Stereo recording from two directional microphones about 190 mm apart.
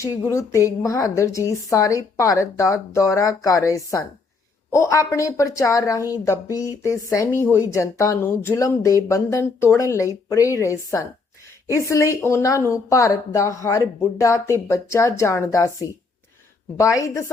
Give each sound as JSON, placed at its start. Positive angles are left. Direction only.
{"t": 0.0, "sound": "a woman's voice", "side_deg": 15}